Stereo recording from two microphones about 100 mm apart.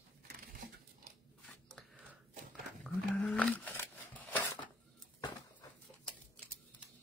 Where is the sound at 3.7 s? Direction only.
20° left (ahead or behind).